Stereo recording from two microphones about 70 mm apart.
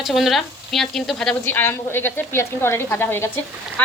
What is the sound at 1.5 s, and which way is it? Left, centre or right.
A woman's voice, left.